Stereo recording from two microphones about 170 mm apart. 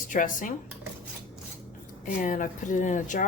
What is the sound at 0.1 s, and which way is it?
Speech, 50° left (ahead or behind).